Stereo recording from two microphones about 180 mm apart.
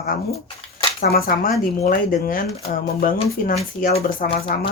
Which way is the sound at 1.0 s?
55° left (ahead or behind).